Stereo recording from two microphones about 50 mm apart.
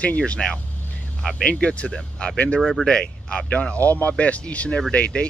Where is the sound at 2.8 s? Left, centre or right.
Centre.